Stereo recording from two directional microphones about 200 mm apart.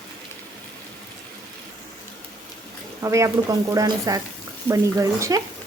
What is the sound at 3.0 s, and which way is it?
Speech, 15° right (ahead or behind).